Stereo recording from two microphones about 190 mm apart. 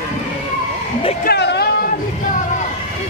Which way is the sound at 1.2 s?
60° left (ahead or behind).